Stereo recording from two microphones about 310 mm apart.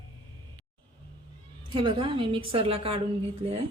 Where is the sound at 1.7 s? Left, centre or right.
Centre.